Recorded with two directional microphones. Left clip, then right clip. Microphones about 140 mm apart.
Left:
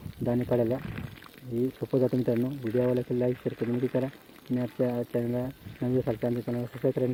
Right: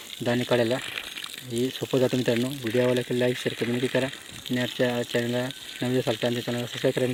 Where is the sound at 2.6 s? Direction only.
10° right (ahead or behind).